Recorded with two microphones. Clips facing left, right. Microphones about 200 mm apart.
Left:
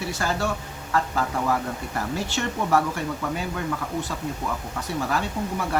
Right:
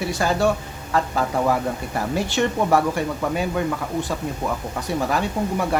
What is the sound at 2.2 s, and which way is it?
Speech, 15° right (ahead or behind).